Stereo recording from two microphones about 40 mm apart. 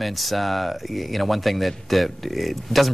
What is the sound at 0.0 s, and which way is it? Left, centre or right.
A man's voice, centre.